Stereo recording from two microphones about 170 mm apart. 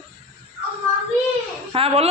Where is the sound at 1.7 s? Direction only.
35° right (ahead or behind).